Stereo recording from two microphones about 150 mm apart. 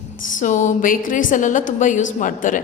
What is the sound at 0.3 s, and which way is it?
A woman's voice, 55° left (ahead or behind).